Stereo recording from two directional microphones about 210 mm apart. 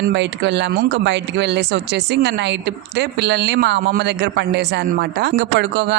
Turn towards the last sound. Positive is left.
turn(degrees=-55)  # may be behind; listen again after turning